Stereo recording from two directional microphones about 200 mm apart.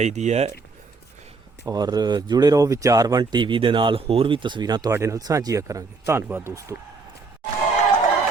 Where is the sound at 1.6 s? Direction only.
20° right (ahead or behind).